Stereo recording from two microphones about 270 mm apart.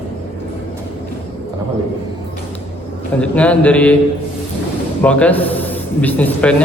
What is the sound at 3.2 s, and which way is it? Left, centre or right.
Speech, centre.